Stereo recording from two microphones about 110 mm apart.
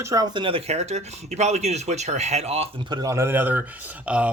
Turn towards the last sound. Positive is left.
turn(degrees=-10)  # may be behind; listen again after turning